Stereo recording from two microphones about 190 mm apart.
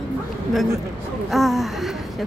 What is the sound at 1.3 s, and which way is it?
Speech, centre (ahead or behind).